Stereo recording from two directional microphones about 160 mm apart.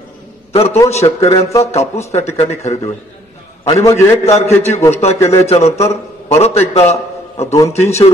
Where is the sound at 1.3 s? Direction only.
20° left (ahead or behind).